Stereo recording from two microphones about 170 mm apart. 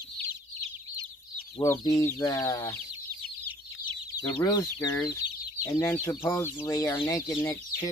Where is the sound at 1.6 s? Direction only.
20° left (ahead or behind).